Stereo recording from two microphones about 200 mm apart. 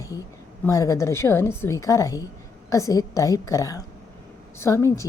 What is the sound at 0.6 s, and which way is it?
A woman's voice, 15° left (ahead or behind).